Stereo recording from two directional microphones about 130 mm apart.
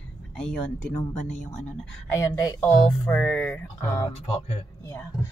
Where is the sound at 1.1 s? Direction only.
65° left (ahead or behind).